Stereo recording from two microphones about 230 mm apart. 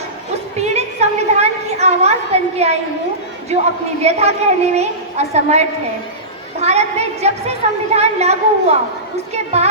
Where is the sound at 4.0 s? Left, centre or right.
Right.